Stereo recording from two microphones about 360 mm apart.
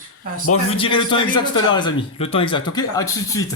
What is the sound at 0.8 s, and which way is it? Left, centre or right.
A man's voice, centre.